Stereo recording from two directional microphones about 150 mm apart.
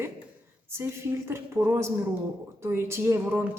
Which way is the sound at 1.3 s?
20° right (ahead or behind).